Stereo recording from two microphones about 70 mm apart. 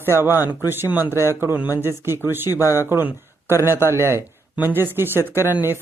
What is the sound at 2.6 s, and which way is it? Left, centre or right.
Speech, left.